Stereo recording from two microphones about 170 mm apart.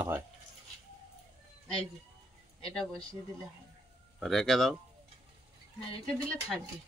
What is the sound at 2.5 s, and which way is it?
Speech, 5° left (ahead or behind).